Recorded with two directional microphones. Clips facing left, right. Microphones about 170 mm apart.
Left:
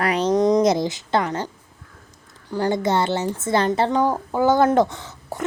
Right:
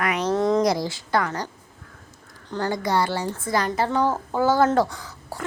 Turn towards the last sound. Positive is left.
turn(degrees=20)  # may be behind; listen again after turning